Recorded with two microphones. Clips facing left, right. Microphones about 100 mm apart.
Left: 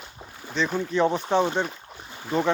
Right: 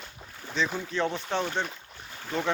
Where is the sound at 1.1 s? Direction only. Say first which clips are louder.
Left 7 dB; 30° left (ahead or behind).